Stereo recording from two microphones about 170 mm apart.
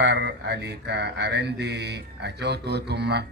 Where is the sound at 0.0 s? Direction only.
90° right.